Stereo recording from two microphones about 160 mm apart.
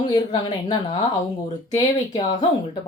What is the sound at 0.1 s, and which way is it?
Speech, 30° left (ahead or behind).